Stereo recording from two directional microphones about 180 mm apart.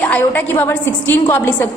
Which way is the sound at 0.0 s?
10° left (ahead or behind).